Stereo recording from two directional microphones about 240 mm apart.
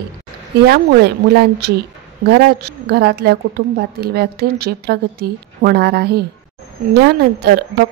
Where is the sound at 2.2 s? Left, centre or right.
Right.